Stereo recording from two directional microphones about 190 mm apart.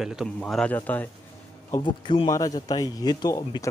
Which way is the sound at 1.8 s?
25° left (ahead or behind).